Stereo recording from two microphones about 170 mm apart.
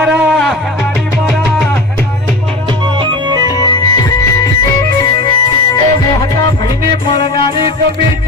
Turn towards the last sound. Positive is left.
turn(degrees=30)  # may be behind; listen again after turning